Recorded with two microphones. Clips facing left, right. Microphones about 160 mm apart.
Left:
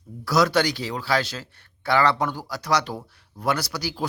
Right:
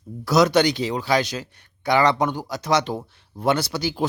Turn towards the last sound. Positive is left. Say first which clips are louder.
# right 4 dB
turn(degrees=-25)  # may be behind; listen again after turning